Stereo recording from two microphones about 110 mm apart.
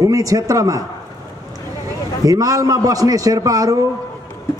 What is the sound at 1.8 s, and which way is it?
A man's voice, 35° right (ahead or behind).